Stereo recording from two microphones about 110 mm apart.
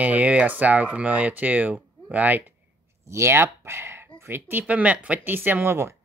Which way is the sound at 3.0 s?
25° right (ahead or behind).